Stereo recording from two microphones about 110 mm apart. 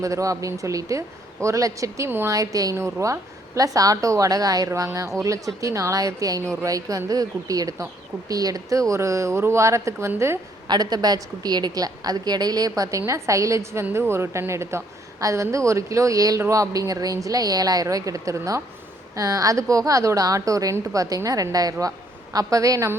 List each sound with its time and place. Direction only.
0.0 s a woman's voice: 30° right (ahead or behind)
10.7 s a woman's voice: 40° right (ahead or behind)